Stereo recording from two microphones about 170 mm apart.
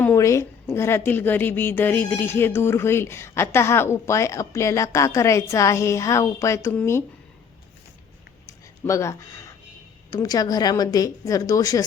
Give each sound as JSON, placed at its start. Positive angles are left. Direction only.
{"t": 0.0, "sound": "a woman's voice", "side_deg": 15}
{"t": 8.4, "sound": "a sound", "side_deg": 15}
{"t": 10.1, "sound": "a woman's voice", "side_deg": 20}